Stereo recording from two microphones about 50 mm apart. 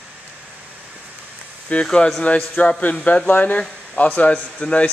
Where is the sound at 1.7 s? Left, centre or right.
Centre.